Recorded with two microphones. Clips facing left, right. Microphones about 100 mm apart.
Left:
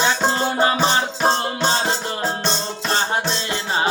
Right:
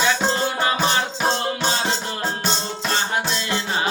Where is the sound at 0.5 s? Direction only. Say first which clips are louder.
Left 3 dB; 25° left (ahead or behind).